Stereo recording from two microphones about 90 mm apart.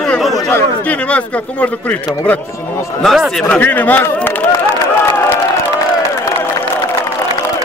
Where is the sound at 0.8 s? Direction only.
15° left (ahead or behind).